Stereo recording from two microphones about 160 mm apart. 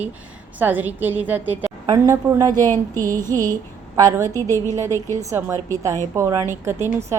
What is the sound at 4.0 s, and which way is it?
A woman's voice, 20° right (ahead or behind).